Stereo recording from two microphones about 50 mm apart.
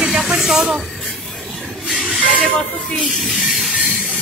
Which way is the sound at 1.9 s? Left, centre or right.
Centre.